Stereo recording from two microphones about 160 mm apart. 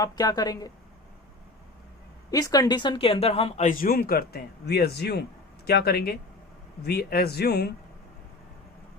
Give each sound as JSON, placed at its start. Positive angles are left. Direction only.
{"t": 0.0, "sound": "a woman's voice", "side_deg": 25}
{"t": 2.3, "sound": "speech", "side_deg": 25}